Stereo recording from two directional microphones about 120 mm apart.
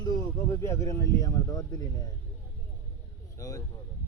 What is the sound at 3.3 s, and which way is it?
Speech, 25° left (ahead or behind).